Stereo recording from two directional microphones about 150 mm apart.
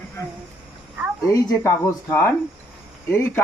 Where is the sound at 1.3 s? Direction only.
20° left (ahead or behind).